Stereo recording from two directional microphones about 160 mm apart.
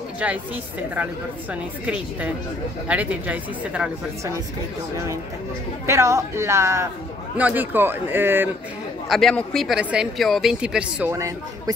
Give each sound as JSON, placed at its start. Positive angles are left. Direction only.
{"t": 1.5, "sound": "a man's voice", "side_deg": -10}
{"t": 5.9, "sound": "a man's voice", "side_deg": -20}
{"t": 9.1, "sound": "speech", "side_deg": 5}
{"t": 11.1, "sound": "speech", "side_deg": -20}